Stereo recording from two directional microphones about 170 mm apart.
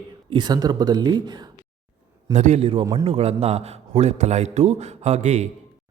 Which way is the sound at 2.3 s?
40° right (ahead or behind).